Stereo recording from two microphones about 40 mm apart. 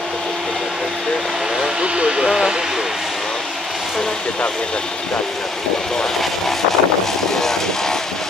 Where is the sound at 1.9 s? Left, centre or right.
Right.